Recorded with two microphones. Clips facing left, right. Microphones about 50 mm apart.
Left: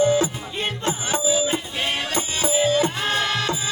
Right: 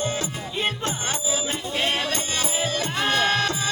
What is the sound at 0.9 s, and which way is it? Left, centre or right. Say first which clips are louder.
Music: left 5 dB; centre.